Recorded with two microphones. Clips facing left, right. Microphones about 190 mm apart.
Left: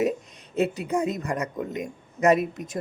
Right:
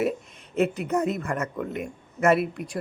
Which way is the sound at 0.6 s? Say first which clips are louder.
Right 1 dB; 10° left (ahead or behind).